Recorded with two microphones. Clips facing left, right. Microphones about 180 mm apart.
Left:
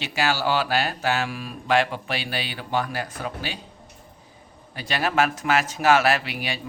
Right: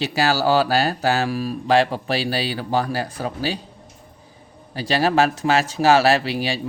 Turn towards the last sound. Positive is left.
turn(degrees=-30)  # may be behind; listen again after turning